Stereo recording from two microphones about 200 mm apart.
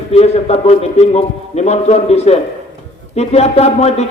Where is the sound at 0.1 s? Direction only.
30° left (ahead or behind).